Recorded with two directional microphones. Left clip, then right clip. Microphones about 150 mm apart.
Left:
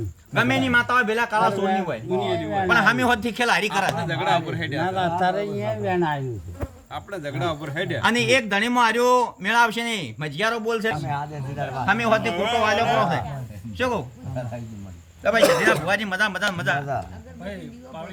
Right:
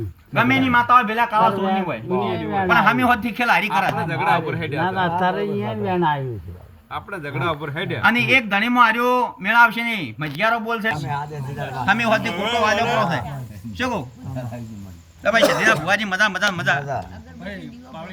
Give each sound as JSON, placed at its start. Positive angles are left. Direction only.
{"t": 0.3, "sound": "speech", "side_deg": 25}
{"t": 5.8, "sound": "speech", "side_deg": 35}
{"t": 6.9, "sound": "speech", "side_deg": 25}
{"t": 11.4, "sound": "speech", "side_deg": 15}
{"t": 13.0, "sound": "a man's voice", "side_deg": 15}
{"t": 15.2, "sound": "a man's voice", "side_deg": 25}